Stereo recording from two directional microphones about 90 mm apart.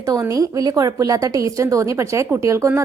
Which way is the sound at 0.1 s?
40° right (ahead or behind).